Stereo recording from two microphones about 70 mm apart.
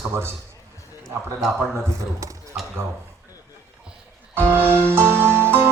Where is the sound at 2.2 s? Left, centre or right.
Right.